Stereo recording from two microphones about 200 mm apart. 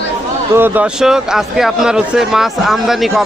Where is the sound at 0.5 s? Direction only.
10° right (ahead or behind).